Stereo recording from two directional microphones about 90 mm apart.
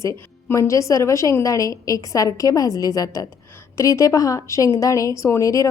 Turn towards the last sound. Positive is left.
turn(degrees=35)  # may be behind; listen again after turning